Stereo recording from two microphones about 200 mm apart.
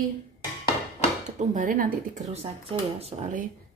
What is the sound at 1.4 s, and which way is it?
A woman's voice, 40° right (ahead or behind).